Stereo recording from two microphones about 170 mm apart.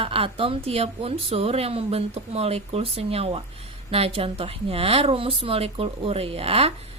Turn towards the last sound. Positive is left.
turn(degrees=-35)  # may be behind; listen again after turning